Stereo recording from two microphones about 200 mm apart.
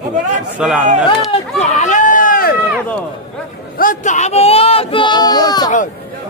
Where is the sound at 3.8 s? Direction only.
40° left (ahead or behind); by 5.7 s 20° left (ahead or behind).